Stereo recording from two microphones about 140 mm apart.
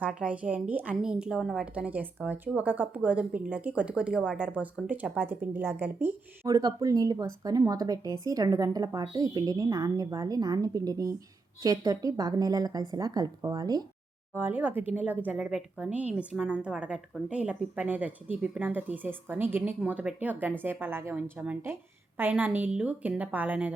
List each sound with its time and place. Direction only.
0.0 s speech: 10° right (ahead or behind)
6.5 s a woman's voice: 25° right (ahead or behind)
14.3 s speech: 15° right (ahead or behind)